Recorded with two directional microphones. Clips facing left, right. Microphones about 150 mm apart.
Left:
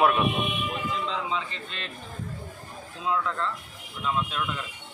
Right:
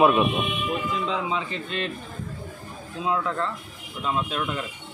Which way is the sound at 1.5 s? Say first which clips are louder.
Right 9 dB; 10° right (ahead or behind).